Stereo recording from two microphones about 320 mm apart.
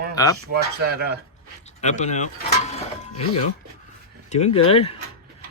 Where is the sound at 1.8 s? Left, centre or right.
Left.